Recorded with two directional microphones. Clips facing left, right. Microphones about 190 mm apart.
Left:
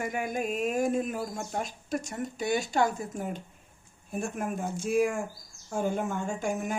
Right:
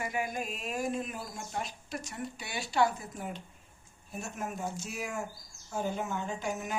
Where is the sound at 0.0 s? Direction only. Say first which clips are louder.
Left 4 dB; 50° left (ahead or behind).